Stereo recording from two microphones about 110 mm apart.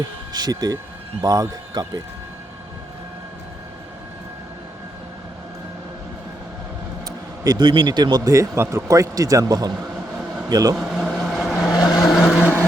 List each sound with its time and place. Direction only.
0.3 s speech: 35° right (ahead or behind)
7.4 s a man's voice: 40° right (ahead or behind)
10.8 s vehicle: 5° right (ahead or behind)